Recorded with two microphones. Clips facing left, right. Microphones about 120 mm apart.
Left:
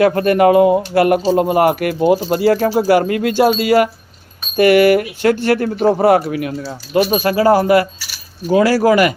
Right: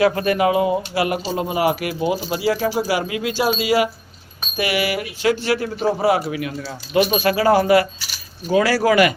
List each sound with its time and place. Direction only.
0.0 s speech: 50° left (ahead or behind)